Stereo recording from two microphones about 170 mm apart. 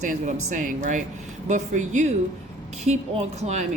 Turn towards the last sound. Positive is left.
turn(degrees=-45)  # may be behind; listen again after turning